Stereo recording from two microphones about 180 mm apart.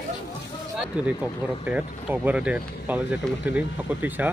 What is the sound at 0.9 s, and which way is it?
Speech, 5° right (ahead or behind).